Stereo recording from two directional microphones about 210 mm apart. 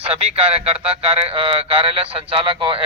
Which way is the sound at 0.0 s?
30° right (ahead or behind).